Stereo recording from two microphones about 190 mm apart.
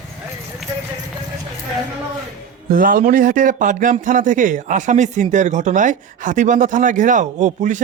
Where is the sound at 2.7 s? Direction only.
50° right (ahead or behind).